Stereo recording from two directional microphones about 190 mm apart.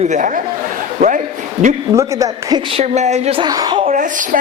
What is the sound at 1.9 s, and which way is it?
Speech, 15° right (ahead or behind).